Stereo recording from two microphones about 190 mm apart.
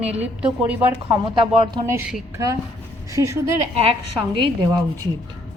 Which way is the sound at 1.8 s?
15° right (ahead or behind).